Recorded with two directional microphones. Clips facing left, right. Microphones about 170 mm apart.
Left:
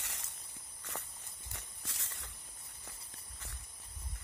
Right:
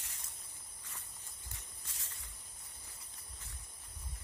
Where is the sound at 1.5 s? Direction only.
85° left.